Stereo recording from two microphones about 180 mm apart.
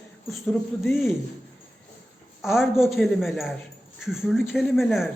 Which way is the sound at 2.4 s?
Centre (ahead or behind).